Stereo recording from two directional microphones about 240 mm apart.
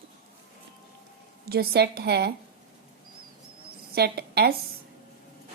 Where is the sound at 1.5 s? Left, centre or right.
Right.